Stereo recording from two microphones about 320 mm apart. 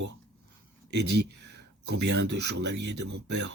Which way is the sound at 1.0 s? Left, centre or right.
Right.